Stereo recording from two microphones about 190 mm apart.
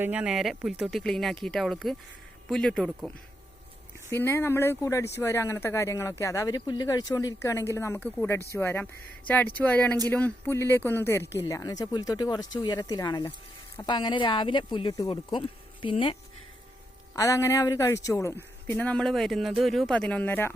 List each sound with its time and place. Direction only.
0.0 s speech: 5° right (ahead or behind)
4.1 s speech: 10° left (ahead or behind)
17.2 s speech: 15° left (ahead or behind)